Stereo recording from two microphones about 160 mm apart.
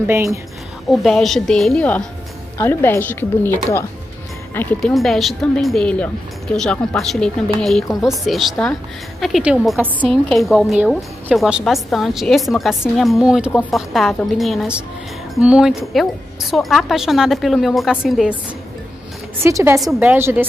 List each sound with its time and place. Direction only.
0.0 s a woman's voice: 15° right (ahead or behind)
0.8 s a woman's voice: centre (ahead or behind)
2.5 s a woman's voice: 15° left (ahead or behind); by 18.3 s 5° right (ahead or behind)
19.4 s a woman's voice: 15° right (ahead or behind)
19.8 s a woman's voice: 5° right (ahead or behind)